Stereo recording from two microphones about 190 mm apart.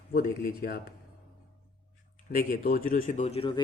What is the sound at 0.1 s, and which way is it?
Speech, 50° left (ahead or behind).